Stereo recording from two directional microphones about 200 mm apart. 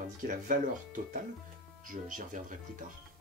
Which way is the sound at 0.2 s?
40° right (ahead or behind).